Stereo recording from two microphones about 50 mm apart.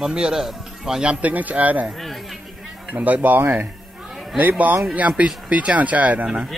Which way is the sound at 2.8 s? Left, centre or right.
Right.